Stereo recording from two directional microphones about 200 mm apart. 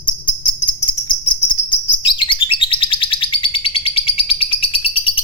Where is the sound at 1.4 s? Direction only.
25° left (ahead or behind).